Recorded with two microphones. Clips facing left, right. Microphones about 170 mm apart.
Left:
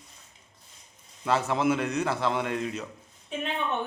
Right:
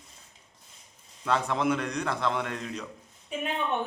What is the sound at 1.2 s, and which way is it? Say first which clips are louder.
A man's voice: left 2 dB; 5° left (ahead or behind).